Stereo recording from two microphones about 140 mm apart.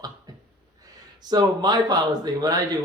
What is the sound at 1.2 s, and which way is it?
Speech, 30° right (ahead or behind).